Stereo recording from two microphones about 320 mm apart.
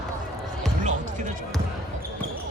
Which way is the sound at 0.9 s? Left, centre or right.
Right.